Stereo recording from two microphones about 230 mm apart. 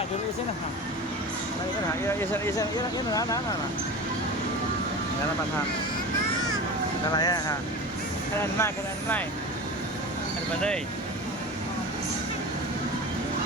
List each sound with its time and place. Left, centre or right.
2.0 s speech: centre
7.2 s speech: centre
8.5 s speech: centre